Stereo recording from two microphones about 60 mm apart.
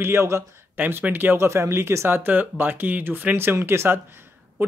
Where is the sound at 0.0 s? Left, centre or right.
Right.